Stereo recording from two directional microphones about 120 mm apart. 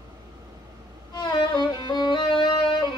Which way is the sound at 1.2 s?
40° left (ahead or behind).